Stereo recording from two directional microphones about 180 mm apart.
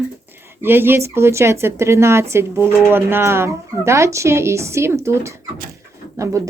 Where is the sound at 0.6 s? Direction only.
10° right (ahead or behind).